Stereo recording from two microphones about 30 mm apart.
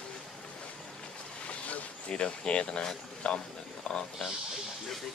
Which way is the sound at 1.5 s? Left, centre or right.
Left.